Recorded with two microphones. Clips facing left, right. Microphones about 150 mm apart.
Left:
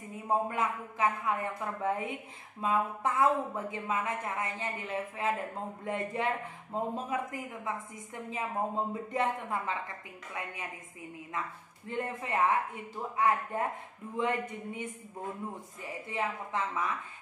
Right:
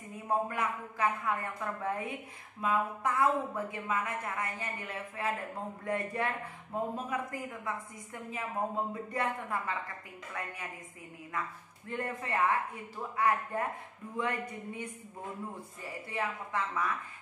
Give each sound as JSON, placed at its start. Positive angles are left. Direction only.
{"t": 0.3, "sound": "a woman's voice", "side_deg": 20}
{"t": 11.9, "sound": "a woman's voice", "side_deg": 20}
{"t": 16.1, "sound": "a woman's voice", "side_deg": 20}